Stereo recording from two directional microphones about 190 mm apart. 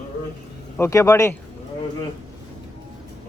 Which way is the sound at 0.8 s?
15° left (ahead or behind).